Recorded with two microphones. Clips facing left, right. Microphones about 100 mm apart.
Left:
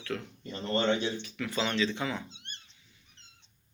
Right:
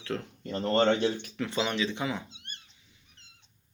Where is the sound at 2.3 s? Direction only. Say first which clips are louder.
Right 1 dB; 5° right (ahead or behind).